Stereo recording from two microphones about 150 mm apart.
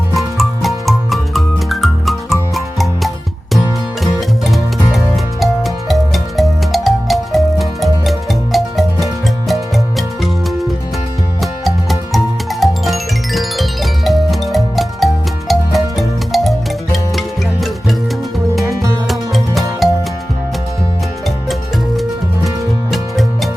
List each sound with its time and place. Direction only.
0.1 s music: centre (ahead or behind)
11.6 s music: centre (ahead or behind)
18.6 s music: 20° right (ahead or behind)
19.0 s music: centre (ahead or behind)
22.4 s music: centre (ahead or behind)